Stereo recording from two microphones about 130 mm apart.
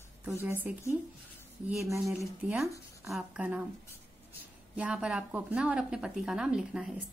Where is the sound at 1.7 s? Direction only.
25° right (ahead or behind).